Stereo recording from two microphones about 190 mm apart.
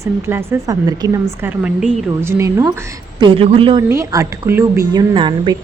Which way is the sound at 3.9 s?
15° right (ahead or behind).